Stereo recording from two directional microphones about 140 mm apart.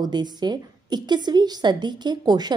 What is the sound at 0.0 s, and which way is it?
A woman's voice, 30° right (ahead or behind).